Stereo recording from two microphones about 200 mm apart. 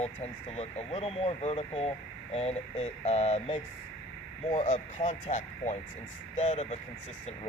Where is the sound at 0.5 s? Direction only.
30° left (ahead or behind).